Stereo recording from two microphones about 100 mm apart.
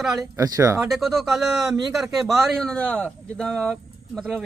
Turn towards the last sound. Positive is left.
turn(degrees=5)  # may be behind; listen again after turning